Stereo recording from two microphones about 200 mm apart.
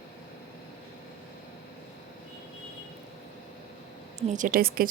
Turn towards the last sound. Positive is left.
turn(degrees=-45)  # may be behind; listen again after turning